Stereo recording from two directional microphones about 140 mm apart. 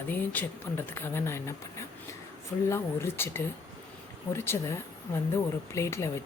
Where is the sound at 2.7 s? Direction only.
20° left (ahead or behind).